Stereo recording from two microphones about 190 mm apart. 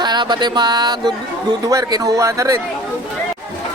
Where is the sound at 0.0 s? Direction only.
20° right (ahead or behind).